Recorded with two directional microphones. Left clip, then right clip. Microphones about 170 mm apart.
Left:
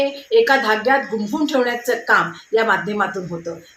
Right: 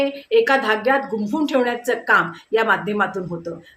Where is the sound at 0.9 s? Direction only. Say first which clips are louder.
Left 2 dB; 10° right (ahead or behind).